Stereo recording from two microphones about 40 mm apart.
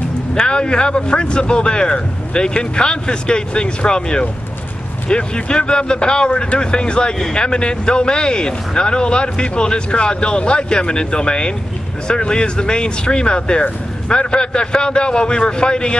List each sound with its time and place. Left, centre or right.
0.3 s speech: left